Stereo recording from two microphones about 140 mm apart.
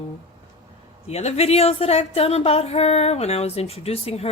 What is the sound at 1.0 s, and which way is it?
A woman's voice, 50° left (ahead or behind).